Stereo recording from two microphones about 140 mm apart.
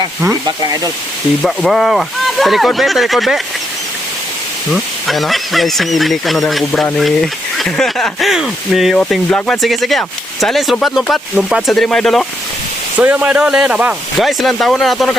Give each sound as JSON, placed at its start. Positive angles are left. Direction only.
{"t": 0.4, "sound": "speech", "side_deg": -30}
{"t": 1.5, "sound": "speech", "side_deg": 0}
{"t": 4.7, "sound": "speech", "side_deg": 0}
{"t": 13.0, "sound": "speech", "side_deg": -10}